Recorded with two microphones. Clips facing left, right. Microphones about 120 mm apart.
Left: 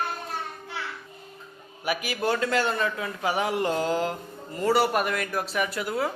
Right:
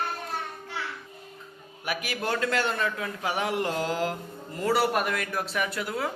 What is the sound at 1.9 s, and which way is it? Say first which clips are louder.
A man's voice: left 3 dB; centre (ahead or behind).